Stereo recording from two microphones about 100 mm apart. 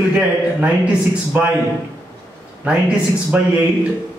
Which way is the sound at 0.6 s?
10° right (ahead or behind).